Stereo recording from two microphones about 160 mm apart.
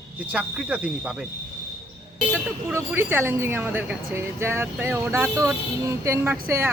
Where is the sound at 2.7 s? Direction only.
15° right (ahead or behind).